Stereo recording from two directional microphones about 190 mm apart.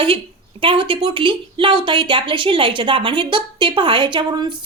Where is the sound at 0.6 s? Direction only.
25° right (ahead or behind).